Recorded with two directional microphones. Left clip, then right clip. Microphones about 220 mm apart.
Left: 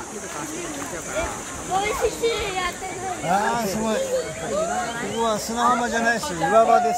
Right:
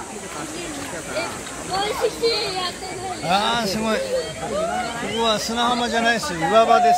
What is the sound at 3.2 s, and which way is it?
Speech, 5° right (ahead or behind).